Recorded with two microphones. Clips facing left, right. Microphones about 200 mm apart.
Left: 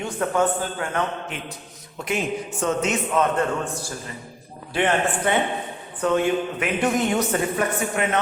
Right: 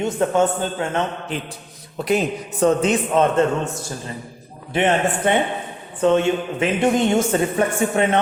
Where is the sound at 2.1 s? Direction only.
35° right (ahead or behind).